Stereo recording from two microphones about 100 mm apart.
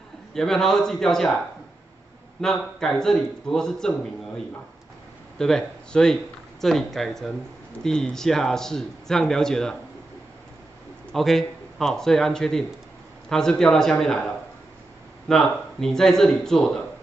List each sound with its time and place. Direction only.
0.3 s speech: 5° left (ahead or behind)
2.4 s speech: 5° left (ahead or behind)
5.4 s speech: 5° left (ahead or behind)
11.1 s speech: centre (ahead or behind)
15.2 s speech: 5° left (ahead or behind)